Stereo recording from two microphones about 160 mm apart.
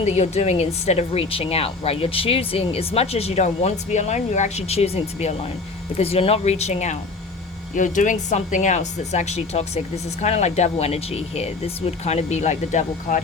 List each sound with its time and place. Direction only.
0.0 s speech: 45° left (ahead or behind)